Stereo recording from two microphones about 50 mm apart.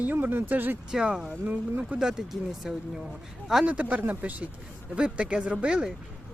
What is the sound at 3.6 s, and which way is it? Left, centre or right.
Speech, right.